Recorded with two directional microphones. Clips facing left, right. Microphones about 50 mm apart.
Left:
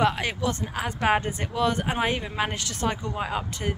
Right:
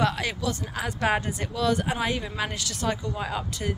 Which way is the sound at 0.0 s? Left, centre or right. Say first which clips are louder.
Left 2 dB; left.